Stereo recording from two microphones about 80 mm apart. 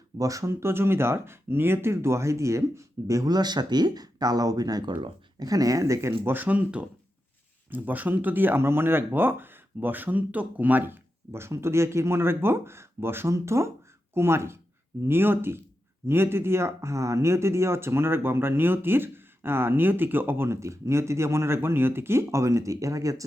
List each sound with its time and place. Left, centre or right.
0.2 s speech: right
0.6 s speech: right
3.3 s speech: right
4.9 s speech: right
5.4 s speech: right
6.2 s speech: right